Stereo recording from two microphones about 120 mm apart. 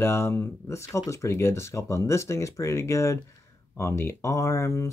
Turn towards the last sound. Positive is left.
turn(degrees=25)  # may be behind; listen again after turning